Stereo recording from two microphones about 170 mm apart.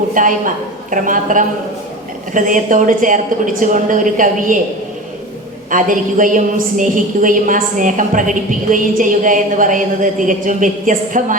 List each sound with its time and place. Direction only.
0.1 s a woman's voice: 50° right (ahead or behind)
5.7 s a woman's voice: 50° right (ahead or behind)